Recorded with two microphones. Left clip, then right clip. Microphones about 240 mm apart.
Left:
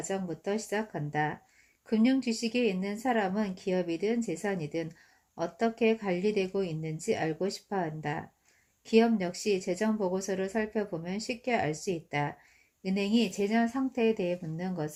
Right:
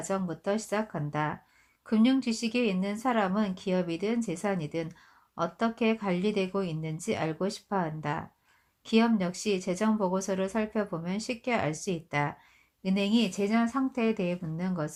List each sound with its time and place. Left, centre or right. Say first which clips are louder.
0.1 s speech: right 3 dB; right